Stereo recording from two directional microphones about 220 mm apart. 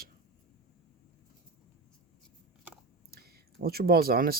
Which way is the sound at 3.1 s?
45° right (ahead or behind).